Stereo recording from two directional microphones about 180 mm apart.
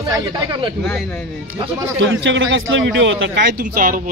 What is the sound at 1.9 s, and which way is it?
A man's voice, 90° right.